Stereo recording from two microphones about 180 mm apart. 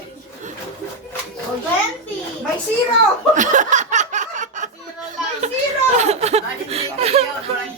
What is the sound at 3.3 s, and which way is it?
Chuckle, 45° right (ahead or behind).